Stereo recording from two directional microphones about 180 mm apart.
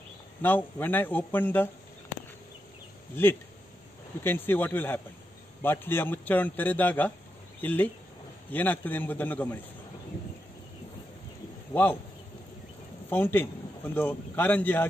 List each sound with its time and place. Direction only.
0.4 s a man's voice: 10° left (ahead or behind)
4.2 s a man's voice: 10° left (ahead or behind)
11.7 s speech: 10° left (ahead or behind)
13.1 s a man's voice: 10° left (ahead or behind)